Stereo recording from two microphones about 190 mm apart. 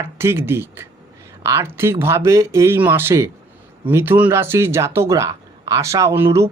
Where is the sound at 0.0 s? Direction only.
10° right (ahead or behind).